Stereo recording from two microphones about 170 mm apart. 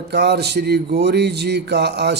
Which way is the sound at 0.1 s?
75° right (ahead or behind).